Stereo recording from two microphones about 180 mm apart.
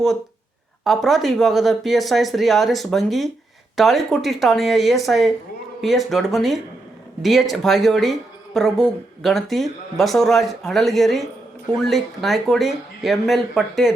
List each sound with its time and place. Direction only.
0.9 s speech: centre (ahead or behind)